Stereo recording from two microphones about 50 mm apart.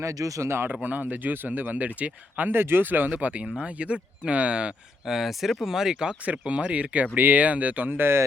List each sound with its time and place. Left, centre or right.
0.0 s speech: right
0.7 s speech: right
1.8 s speech: right
2.5 s speech: right
3.1 s speech: right
5.0 s speech: centre; by 7.9 s right
7.9 s speech: right